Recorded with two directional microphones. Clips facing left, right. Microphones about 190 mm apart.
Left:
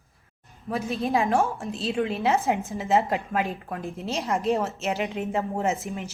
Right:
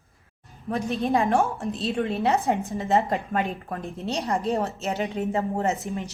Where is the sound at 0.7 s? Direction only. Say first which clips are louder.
Right 1 dB; centre (ahead or behind).